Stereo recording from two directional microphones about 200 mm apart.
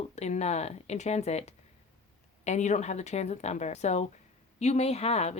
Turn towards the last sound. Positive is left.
turn(degrees=35)  # may be behind; listen again after turning